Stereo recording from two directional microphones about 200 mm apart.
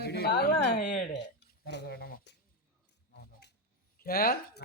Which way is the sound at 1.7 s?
55° left (ahead or behind).